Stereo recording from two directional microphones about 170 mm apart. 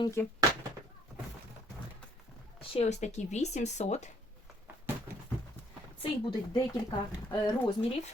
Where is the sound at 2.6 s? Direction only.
35° left (ahead or behind).